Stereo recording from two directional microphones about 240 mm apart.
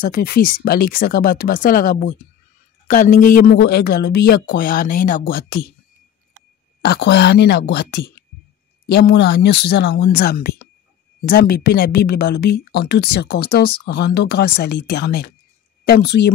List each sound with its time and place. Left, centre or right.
0.1 s speech: left
3.2 s speech: left
6.8 s speech: left